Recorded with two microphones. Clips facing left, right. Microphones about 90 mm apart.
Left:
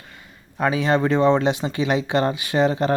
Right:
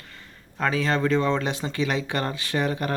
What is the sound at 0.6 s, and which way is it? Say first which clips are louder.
Speech: left 4 dB; 20° left (ahead or behind).